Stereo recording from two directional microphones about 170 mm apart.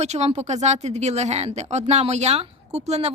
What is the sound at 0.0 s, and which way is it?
A woman's voice, 40° right (ahead or behind).